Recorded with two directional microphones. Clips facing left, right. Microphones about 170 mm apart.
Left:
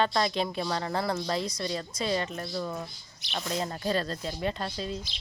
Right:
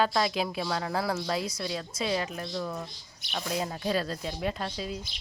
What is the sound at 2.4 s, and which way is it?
Speech, 5° left (ahead or behind).